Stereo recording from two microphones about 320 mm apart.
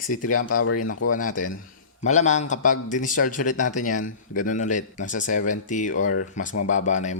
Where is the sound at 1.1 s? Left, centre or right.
Left.